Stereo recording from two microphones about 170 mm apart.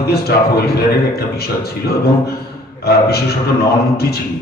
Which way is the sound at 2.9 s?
65° left (ahead or behind).